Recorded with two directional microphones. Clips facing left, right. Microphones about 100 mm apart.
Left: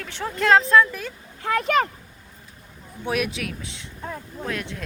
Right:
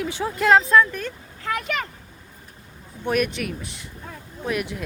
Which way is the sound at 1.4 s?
35° left (ahead or behind).